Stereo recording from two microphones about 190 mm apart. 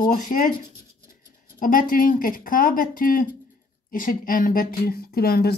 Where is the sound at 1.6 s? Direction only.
45° left (ahead or behind).